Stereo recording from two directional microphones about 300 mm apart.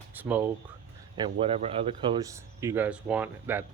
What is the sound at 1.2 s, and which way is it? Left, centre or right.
Speech, centre.